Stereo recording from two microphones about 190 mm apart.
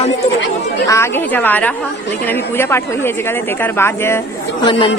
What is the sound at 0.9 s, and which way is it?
Speech, 10° left (ahead or behind).